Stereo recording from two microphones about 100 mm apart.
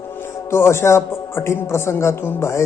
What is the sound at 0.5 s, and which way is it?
Mantra, 25° left (ahead or behind).